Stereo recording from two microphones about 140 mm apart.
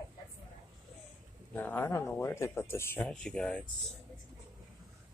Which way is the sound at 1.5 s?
15° left (ahead or behind).